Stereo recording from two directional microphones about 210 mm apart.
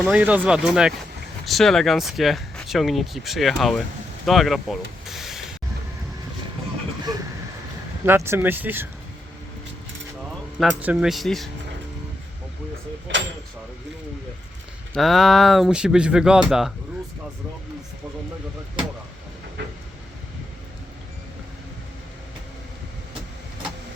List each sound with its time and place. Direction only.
0.0 s speech: 5° right (ahead or behind)
8.0 s speech: 10° right (ahead or behind)
10.6 s speech: 5° right (ahead or behind)
13.1 s a sound: 60° right (ahead or behind)
14.9 s speech: centre (ahead or behind)